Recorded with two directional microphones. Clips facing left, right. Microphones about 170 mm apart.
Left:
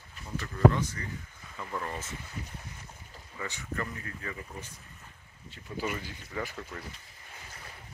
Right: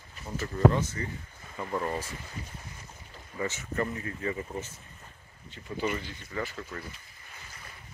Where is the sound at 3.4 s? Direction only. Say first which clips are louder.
Right 5 dB; 20° right (ahead or behind).